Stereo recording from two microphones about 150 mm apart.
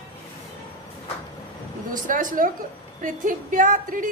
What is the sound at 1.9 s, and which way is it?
A woman's voice, 60° right (ahead or behind).